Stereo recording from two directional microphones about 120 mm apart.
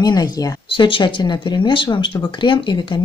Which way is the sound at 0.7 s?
45° left (ahead or behind).